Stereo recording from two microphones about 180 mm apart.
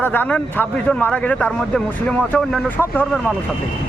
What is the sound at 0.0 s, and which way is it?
Speech, 10° left (ahead or behind).